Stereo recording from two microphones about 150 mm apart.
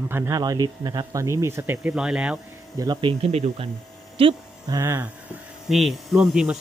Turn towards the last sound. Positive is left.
turn(degrees=-5)  # may be behind; listen again after turning